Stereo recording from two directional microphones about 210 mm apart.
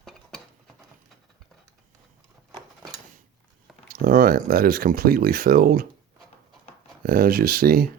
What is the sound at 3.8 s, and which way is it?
Speech, 45° right (ahead or behind).